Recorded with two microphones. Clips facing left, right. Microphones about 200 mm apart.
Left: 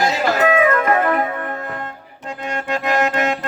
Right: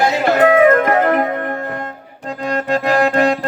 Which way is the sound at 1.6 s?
40° right (ahead or behind).